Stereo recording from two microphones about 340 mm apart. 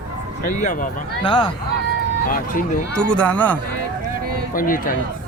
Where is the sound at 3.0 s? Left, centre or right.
Centre.